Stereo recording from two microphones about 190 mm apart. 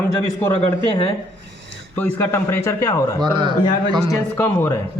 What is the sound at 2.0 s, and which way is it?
Speech, 10° left (ahead or behind).